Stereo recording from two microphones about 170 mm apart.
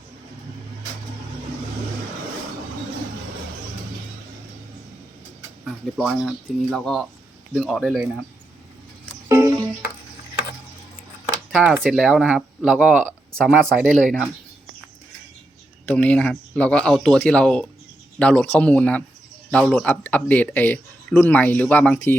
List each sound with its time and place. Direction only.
5.6 s speech: centre (ahead or behind)
9.3 s music: 20° right (ahead or behind)
11.8 s speech: centre (ahead or behind)
13.4 s speech: centre (ahead or behind)
15.9 s speech: 10° left (ahead or behind)